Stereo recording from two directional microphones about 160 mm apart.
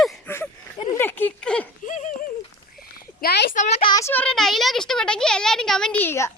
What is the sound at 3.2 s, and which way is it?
Speech, 75° left (ahead or behind).